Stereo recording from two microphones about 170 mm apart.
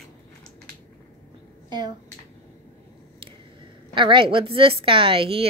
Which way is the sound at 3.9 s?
30° right (ahead or behind).